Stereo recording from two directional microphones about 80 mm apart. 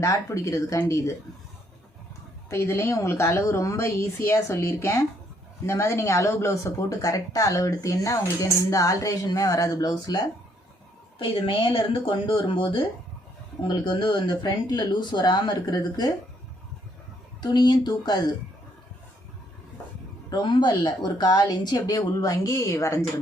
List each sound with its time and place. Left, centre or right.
0.0 s speech: left
2.5 s speech: left
11.2 s speech: left
17.4 s speech: left
20.3 s speech: left
20.8 s speech: left